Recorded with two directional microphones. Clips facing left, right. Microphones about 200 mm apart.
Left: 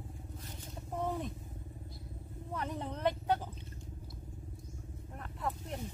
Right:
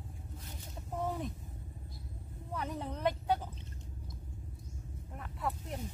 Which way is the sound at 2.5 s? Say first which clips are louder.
Even; 5° right (ahead or behind).